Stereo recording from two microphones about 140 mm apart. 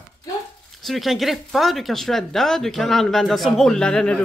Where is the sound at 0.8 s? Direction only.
Centre (ahead or behind).